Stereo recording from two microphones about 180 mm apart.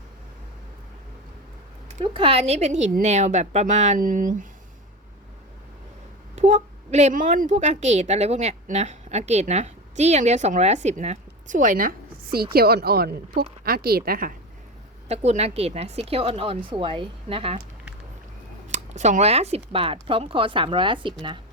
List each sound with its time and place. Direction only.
2.1 s a woman's voice: 30° right (ahead or behind); by 4.4 s 45° right (ahead or behind)
6.3 s a woman's voice: 40° right (ahead or behind)
15.0 s a woman's voice: 40° right (ahead or behind)
18.7 s speech: 40° right (ahead or behind)